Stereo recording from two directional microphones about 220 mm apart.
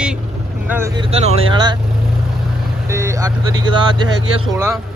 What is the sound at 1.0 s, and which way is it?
Speech, 25° right (ahead or behind).